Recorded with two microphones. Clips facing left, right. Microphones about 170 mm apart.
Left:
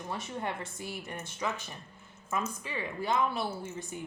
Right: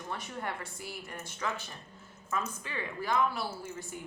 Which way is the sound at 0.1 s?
20° left (ahead or behind).